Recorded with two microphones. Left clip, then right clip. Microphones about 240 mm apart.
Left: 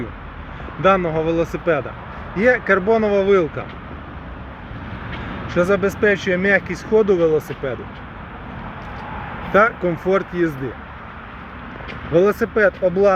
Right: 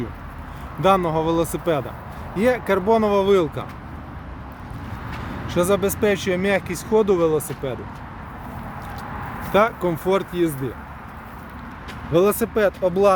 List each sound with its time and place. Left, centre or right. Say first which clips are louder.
0.8 s speech: left 2 dB; centre
5.5 s speech: left 2 dB; centre
9.5 s speech: left 3 dB; centre
12.1 s speech: left 2 dB; centre